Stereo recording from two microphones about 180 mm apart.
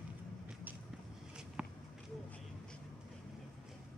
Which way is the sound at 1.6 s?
5° right (ahead or behind).